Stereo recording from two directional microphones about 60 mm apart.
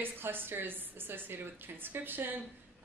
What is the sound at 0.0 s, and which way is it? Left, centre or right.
A woman's voice, right.